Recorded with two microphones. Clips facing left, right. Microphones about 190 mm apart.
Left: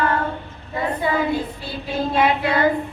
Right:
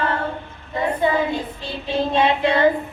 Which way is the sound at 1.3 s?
10° left (ahead or behind).